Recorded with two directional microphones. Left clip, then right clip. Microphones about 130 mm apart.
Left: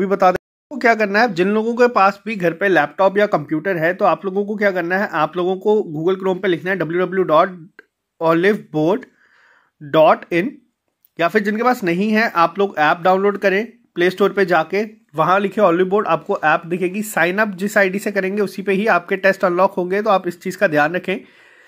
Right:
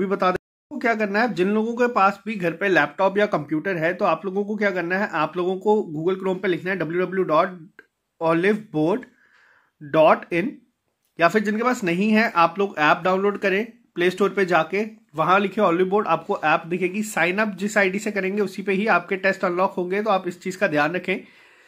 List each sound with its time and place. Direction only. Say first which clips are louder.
0.0 s speech: left 7 dB; 40° left (ahead or behind)